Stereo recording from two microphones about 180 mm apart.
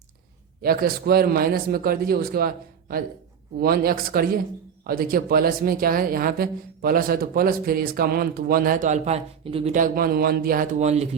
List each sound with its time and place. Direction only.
0.6 s speech: 55° right (ahead or behind)
3.6 s speech: 55° right (ahead or behind); by 9.7 s 30° right (ahead or behind)
9.7 s speech: 50° right (ahead or behind)